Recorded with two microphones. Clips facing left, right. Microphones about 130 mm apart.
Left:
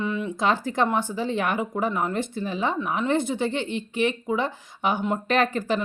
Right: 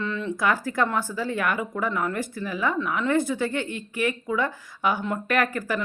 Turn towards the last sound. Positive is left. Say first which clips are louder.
# left 2 dB
turn(degrees=25)  # may be behind; listen again after turning